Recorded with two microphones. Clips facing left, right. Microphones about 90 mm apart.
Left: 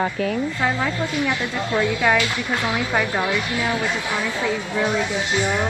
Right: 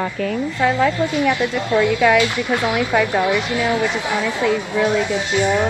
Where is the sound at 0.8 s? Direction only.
20° right (ahead or behind).